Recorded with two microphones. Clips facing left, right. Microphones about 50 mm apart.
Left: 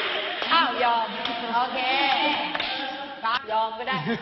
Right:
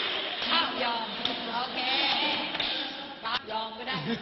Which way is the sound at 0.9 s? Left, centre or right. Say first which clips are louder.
Left 7 dB; left.